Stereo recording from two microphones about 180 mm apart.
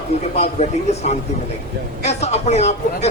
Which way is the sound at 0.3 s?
40° left (ahead or behind).